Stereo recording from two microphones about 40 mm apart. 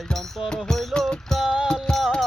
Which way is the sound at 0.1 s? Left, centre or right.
Centre.